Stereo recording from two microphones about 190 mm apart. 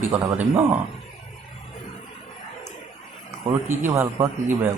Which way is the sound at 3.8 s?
10° right (ahead or behind).